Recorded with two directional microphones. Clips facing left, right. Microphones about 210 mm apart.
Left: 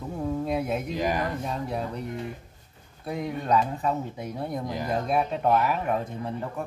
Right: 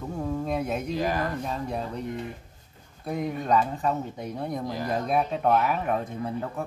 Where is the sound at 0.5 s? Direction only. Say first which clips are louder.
Left 1 dB; 5° left (ahead or behind).